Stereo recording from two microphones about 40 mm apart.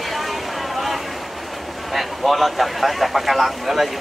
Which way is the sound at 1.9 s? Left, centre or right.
Centre.